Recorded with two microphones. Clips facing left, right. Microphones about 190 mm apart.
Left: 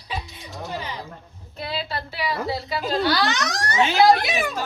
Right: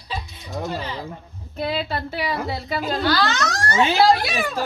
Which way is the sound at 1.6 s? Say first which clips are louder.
Right 5 dB; 55° right (ahead or behind).